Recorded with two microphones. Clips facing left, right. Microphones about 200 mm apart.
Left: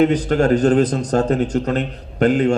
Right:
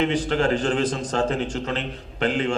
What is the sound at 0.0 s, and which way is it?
A man's voice, 40° left (ahead or behind).